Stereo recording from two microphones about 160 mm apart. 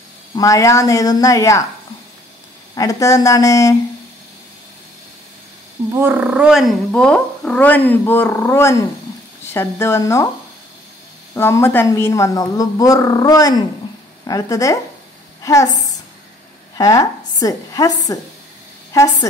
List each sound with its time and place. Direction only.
0.4 s a man's voice: 20° left (ahead or behind)
2.7 s a man's voice: 20° left (ahead or behind)
5.9 s speech: 10° right (ahead or behind); by 10.2 s 15° left (ahead or behind)
11.3 s a man's voice: 15° left (ahead or behind)
16.7 s a woman's voice: 20° left (ahead or behind)